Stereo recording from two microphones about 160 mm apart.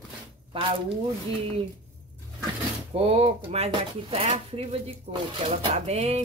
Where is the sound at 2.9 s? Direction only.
40° right (ahead or behind).